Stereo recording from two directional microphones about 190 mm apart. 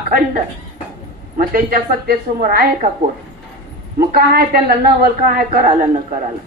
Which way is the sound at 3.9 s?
55° right (ahead or behind).